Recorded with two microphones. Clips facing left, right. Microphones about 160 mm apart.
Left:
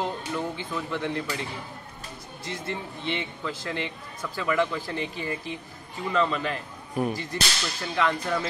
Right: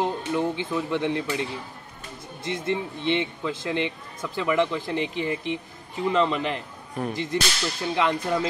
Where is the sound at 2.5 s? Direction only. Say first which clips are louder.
Right 6 dB; 20° right (ahead or behind).